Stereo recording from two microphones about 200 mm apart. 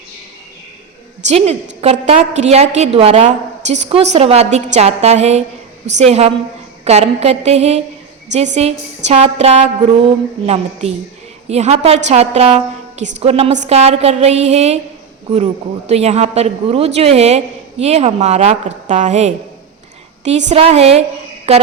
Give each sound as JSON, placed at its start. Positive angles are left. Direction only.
{"t": 1.3, "sound": "a woman's voice", "side_deg": -35}
{"t": 15.9, "sound": "a woman's voice", "side_deg": -30}